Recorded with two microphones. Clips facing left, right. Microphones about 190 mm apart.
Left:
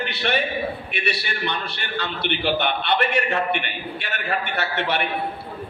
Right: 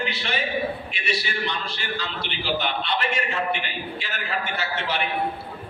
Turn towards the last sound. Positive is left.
turn(degrees=65)  # may be behind; listen again after turning